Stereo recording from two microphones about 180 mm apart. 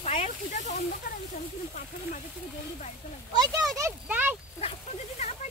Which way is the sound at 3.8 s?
10° right (ahead or behind).